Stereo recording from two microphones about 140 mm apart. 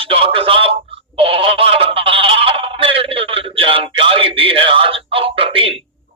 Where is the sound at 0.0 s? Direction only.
40° right (ahead or behind).